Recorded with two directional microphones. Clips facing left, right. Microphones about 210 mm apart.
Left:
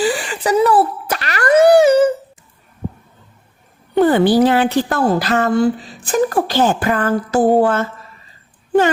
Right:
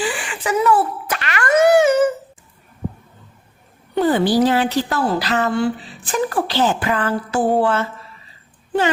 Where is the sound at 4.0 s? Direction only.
60° left (ahead or behind).